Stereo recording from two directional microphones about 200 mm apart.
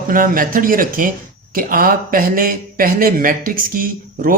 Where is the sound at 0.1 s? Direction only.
45° right (ahead or behind).